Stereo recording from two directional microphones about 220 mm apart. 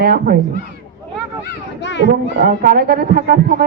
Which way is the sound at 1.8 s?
55° left (ahead or behind).